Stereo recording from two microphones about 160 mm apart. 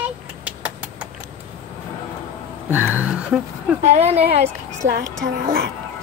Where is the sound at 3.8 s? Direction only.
40° right (ahead or behind).